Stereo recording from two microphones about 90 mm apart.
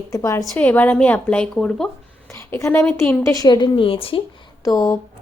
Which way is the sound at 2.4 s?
25° left (ahead or behind).